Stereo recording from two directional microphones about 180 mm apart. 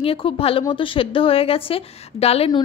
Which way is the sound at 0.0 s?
30° left (ahead or behind).